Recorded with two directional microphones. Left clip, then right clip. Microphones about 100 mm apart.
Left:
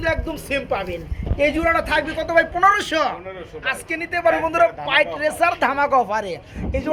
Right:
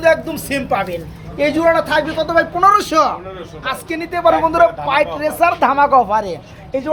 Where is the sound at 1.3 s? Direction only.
20° left (ahead or behind).